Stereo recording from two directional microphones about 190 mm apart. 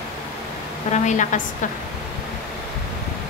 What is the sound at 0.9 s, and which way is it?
Speech, 40° left (ahead or behind).